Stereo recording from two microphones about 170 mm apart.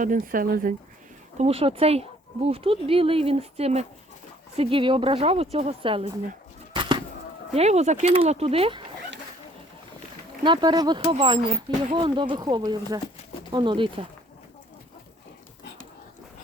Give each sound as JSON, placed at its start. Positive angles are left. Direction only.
{"t": 0.0, "sound": "speech", "side_deg": -50}
{"t": 1.4, "sound": "speech", "side_deg": -35}
{"t": 6.7, "sound": "bird", "side_deg": -30}
{"t": 7.5, "sound": "speech", "side_deg": -40}
{"t": 10.4, "sound": "speech", "side_deg": -25}